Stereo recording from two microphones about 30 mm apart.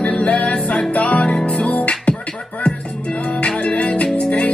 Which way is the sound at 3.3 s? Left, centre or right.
Left.